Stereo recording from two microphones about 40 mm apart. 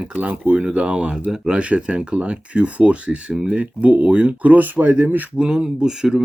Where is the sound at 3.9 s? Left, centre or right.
Right.